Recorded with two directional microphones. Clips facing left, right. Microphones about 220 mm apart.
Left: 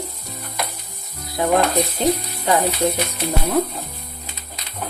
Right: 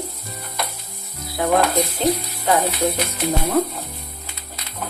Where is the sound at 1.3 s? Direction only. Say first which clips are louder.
Even; 15° left (ahead or behind).